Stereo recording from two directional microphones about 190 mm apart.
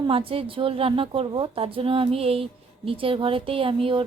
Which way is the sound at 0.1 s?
30° right (ahead or behind).